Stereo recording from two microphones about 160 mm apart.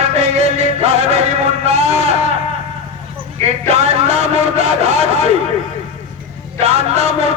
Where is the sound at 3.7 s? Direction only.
40° right (ahead or behind).